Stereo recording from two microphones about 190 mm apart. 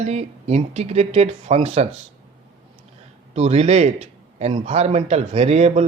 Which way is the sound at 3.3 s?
35° right (ahead or behind).